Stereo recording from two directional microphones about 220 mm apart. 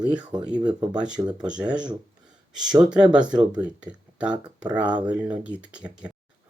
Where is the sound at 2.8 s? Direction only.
5° right (ahead or behind).